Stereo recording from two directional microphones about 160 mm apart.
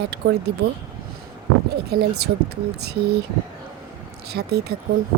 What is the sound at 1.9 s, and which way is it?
Speech, 90° right.